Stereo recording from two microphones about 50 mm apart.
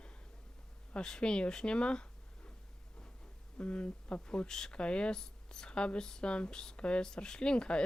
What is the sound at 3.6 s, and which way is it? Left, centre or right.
Speech, left.